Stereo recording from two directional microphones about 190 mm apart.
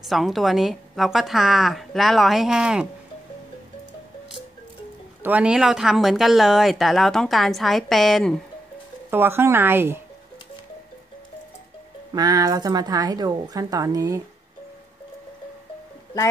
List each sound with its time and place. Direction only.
0.0 s speech: centre (ahead or behind)
5.2 s speech: 5° right (ahead or behind)
9.1 s speech: 10° right (ahead or behind)
12.1 s speech: 20° right (ahead or behind)